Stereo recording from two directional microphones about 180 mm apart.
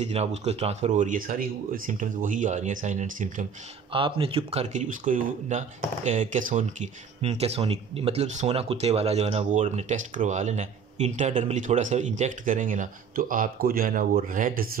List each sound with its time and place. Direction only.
0.0 s speech: 35° right (ahead or behind)
3.9 s speech: 30° right (ahead or behind); by 14.7 s 50° right (ahead or behind)